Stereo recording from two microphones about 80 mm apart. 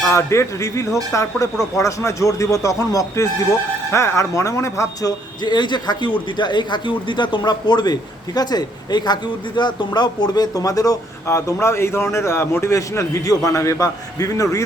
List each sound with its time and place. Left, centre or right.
0.1 s a man's voice: left
5.4 s a man's voice: left